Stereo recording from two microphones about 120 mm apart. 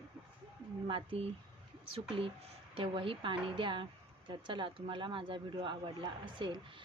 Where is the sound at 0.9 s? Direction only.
50° right (ahead or behind).